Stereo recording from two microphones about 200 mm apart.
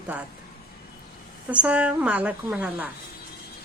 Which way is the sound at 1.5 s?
5° right (ahead or behind).